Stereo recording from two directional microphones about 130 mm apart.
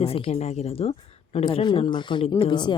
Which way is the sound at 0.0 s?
50° left (ahead or behind).